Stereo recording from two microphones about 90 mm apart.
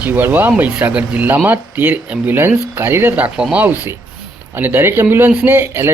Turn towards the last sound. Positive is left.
turn(degrees=-25)  # may be behind; listen again after turning